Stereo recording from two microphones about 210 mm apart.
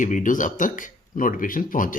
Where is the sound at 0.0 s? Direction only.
35° left (ahead or behind).